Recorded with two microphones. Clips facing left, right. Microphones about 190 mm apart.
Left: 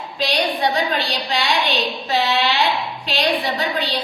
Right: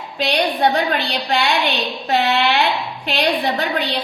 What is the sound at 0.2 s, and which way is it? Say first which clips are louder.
A woman's voice: right 3 dB; 60° right (ahead or behind).